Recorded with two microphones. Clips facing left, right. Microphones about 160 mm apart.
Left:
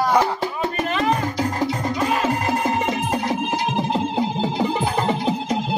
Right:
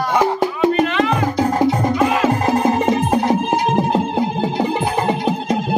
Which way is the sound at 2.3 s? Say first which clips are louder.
Right 5 dB; 40° right (ahead or behind).